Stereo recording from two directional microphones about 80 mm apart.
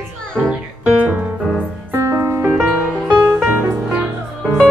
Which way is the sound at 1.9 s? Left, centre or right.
Right.